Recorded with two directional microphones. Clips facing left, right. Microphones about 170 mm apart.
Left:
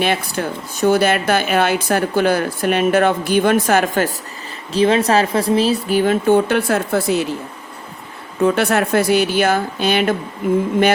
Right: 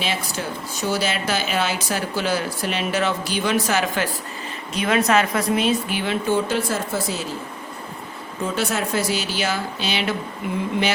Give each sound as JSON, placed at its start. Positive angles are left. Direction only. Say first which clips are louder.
{"t": 0.0, "sound": "speech", "louder": "left 7 dB", "side_deg": 55}
{"t": 4.7, "sound": "speech", "louder": "left 5 dB", "side_deg": 30}
{"t": 8.4, "sound": "speech", "louder": "left 8 dB", "side_deg": 60}